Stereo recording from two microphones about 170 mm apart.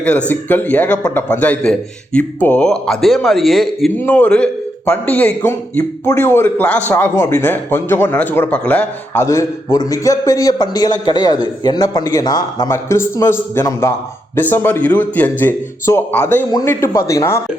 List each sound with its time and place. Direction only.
0.3 s a man's voice: 10° left (ahead or behind)